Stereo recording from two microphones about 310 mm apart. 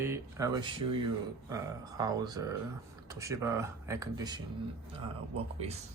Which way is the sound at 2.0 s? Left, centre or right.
Centre.